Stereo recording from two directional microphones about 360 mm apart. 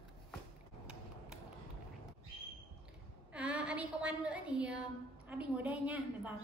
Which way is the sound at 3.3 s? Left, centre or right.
Centre.